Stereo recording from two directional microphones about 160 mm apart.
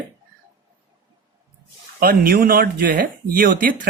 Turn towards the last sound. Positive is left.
turn(degrees=-60)  # may be behind; listen again after turning